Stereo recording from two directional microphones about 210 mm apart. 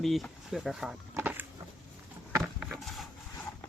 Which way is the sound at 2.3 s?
10° right (ahead or behind).